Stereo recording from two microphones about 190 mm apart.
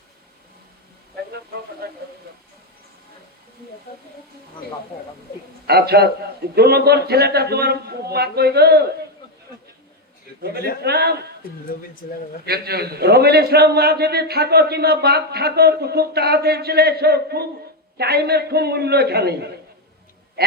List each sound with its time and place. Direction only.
1.8 s a man's voice: 55° right (ahead or behind)
5.6 s a man's voice: 55° right (ahead or behind)
10.4 s a man's voice: 55° right (ahead or behind)
12.5 s a man's voice: 55° right (ahead or behind)